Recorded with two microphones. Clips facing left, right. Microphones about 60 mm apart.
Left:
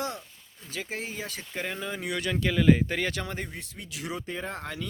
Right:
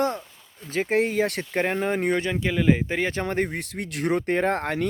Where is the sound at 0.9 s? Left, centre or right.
Right.